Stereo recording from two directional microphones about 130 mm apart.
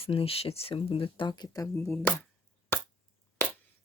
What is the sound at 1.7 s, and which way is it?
Speech, 20° left (ahead or behind).